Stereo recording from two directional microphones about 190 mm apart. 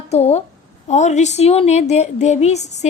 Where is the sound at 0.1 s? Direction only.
35° left (ahead or behind).